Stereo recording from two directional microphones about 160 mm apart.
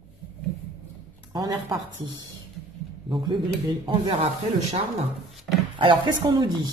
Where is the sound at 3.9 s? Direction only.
35° right (ahead or behind).